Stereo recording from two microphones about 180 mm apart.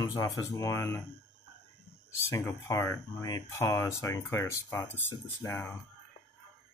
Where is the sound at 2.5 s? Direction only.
15° left (ahead or behind).